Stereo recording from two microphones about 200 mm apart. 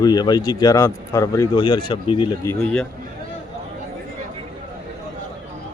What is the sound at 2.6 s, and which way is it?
Speech, 5° left (ahead or behind).